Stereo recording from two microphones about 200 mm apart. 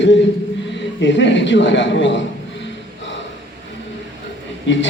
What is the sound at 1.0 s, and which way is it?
A man's voice, 65° left (ahead or behind).